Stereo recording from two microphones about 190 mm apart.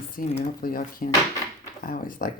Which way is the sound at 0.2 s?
45° left (ahead or behind).